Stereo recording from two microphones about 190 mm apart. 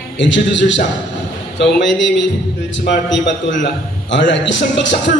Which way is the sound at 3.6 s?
70° left (ahead or behind).